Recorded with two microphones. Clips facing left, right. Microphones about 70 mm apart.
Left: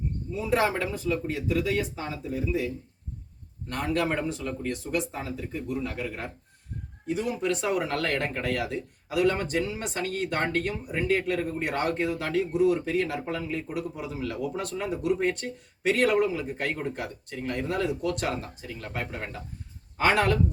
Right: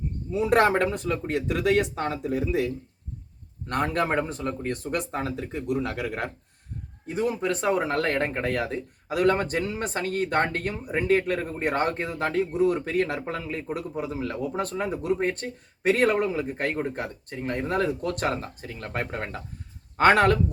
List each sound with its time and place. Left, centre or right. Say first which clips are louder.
0.3 s speech: right 5 dB; right
3.7 s speech: right 2 dB; right
7.1 s a man's voice: right 2 dB; right